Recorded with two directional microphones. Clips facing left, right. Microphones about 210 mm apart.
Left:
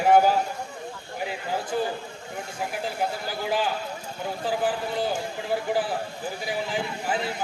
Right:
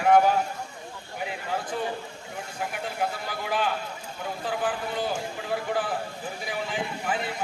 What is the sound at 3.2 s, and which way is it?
A man's voice, 30° left (ahead or behind).